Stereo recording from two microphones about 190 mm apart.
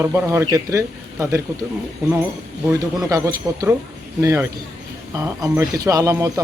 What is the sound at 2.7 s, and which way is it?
Speech, 20° right (ahead or behind).